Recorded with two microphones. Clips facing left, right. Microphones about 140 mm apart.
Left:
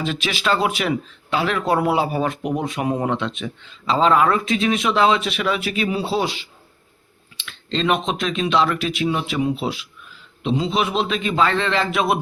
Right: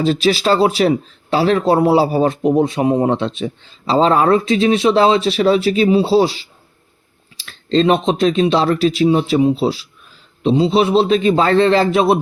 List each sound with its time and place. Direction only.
0.0 s speech: 35° right (ahead or behind)